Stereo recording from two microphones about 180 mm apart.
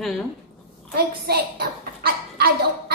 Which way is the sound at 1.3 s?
60° right (ahead or behind).